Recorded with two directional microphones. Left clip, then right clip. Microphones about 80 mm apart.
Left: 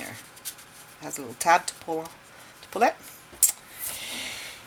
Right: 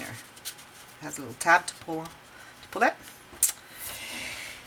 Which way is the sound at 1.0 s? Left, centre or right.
Left.